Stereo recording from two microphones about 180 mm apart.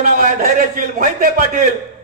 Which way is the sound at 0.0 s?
50° right (ahead or behind).